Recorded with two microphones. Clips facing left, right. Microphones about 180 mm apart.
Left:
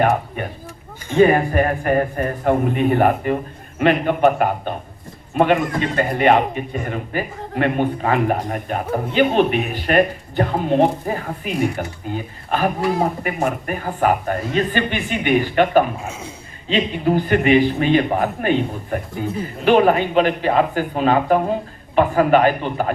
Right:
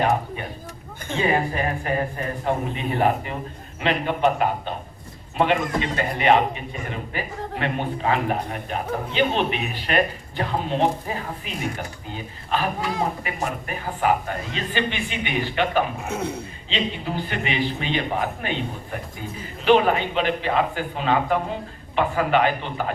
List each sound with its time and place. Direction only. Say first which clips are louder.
1.1 s a man's voice: left 8 dB; 55° left (ahead or behind)
16.0 s a man's voice: right 4 dB; 65° right (ahead or behind)
16.6 s a man's voice: left 9 dB; 50° left (ahead or behind)